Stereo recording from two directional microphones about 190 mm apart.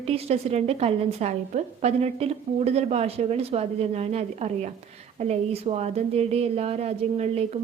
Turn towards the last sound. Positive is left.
turn(degrees=-35)  # may be behind; listen again after turning